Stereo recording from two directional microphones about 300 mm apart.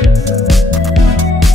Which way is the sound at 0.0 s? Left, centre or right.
Centre.